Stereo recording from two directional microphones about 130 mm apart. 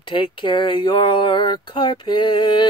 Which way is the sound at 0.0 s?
40° left (ahead or behind).